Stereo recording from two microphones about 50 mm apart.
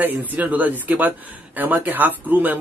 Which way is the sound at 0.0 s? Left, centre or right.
Right.